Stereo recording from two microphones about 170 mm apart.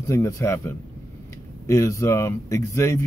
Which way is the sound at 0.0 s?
20° left (ahead or behind).